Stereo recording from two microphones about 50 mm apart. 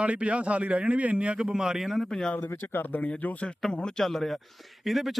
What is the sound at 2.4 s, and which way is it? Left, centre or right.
Speech, left.